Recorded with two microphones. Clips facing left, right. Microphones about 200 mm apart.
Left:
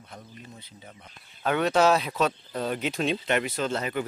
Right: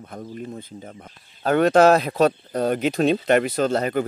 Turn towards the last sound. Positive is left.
turn(degrees=-45)  # may be behind; listen again after turning